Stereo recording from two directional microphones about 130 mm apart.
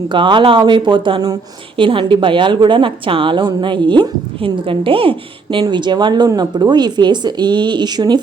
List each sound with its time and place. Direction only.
0.1 s a woman's voice: 40° right (ahead or behind)